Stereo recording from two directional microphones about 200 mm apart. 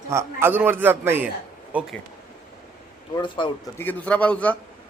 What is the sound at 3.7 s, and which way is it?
Speech, 10° left (ahead or behind).